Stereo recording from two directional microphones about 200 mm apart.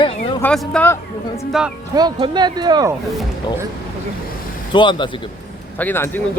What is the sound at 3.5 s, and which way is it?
Speech, 25° left (ahead or behind).